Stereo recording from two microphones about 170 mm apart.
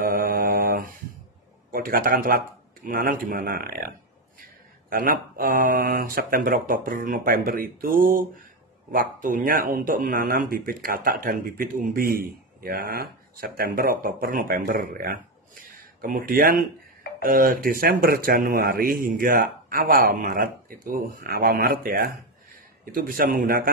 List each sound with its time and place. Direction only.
0.0 s mantra: 55° right (ahead or behind)
1.7 s speech: 60° right (ahead or behind)